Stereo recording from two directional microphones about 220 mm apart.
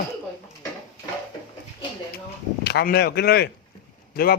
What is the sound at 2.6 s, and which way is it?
Speech, 45° left (ahead or behind).